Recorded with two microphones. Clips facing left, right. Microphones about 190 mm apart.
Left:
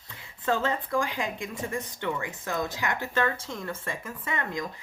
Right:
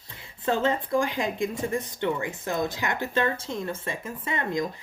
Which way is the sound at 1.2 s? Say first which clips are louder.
Right 5 dB; 35° right (ahead or behind).